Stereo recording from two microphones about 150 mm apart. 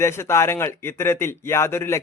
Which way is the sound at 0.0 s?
20° left (ahead or behind).